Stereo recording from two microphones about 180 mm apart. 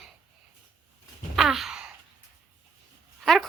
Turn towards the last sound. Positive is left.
turn(degrees=0)  # may be behind; listen again after turning